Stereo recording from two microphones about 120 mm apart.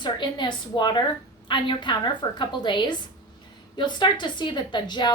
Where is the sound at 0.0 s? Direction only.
40° left (ahead or behind).